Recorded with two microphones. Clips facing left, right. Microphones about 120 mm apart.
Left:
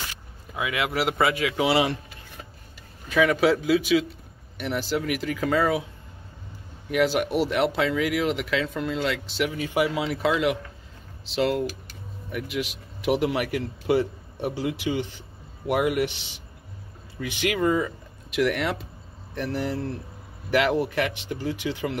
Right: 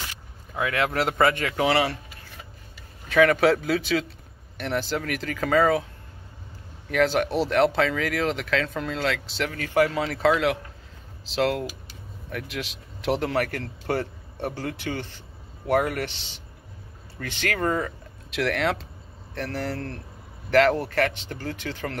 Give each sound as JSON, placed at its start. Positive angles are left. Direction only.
{"t": 0.6, "sound": "speech", "side_deg": 10}
{"t": 1.7, "sound": "speech", "side_deg": 15}
{"t": 3.1, "sound": "speech", "side_deg": 5}
{"t": 6.9, "sound": "speech", "side_deg": 5}
{"t": 9.5, "sound": "a man's voice", "side_deg": 15}
{"t": 17.6, "sound": "speech", "side_deg": -50}
{"t": 18.3, "sound": "speech", "side_deg": 5}